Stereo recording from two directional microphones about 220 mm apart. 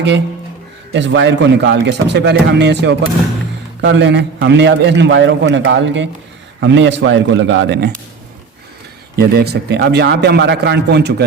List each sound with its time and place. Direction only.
0.9 s a man's voice: 55° right (ahead or behind)
9.1 s a man's voice: 45° right (ahead or behind)